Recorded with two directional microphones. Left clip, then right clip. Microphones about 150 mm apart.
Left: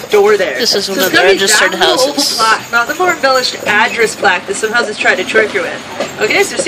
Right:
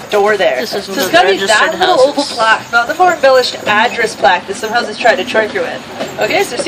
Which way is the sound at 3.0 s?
20° right (ahead or behind).